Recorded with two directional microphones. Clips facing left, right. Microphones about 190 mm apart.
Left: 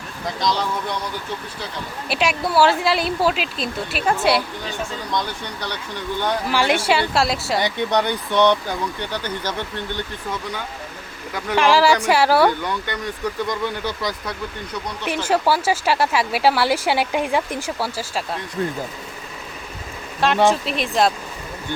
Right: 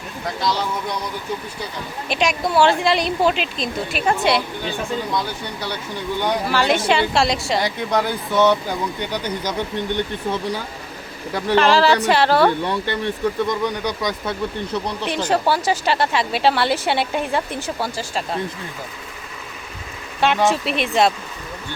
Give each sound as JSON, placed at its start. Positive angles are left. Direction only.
{"t": 0.3, "sound": "speech", "side_deg": -5}
{"t": 2.0, "sound": "speech", "side_deg": 5}
{"t": 6.5, "sound": "speech", "side_deg": 10}
{"t": 10.3, "sound": "speech", "side_deg": -30}
{"t": 11.5, "sound": "speech", "side_deg": 10}
{"t": 12.6, "sound": "speech", "side_deg": -30}
{"t": 15.0, "sound": "speech", "side_deg": 5}
{"t": 20.2, "sound": "speech", "side_deg": 0}